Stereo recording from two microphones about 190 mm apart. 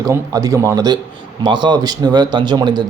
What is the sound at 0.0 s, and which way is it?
A man's voice, 20° right (ahead or behind).